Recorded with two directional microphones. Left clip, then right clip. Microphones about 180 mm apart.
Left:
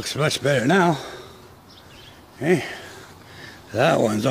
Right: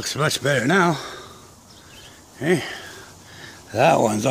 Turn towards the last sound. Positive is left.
turn(degrees=0)  # may be behind; listen again after turning